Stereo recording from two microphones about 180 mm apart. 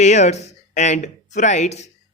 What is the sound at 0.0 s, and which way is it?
Speech, 40° left (ahead or behind).